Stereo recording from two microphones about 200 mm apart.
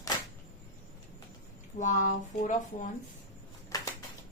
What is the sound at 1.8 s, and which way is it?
Speech, 40° left (ahead or behind).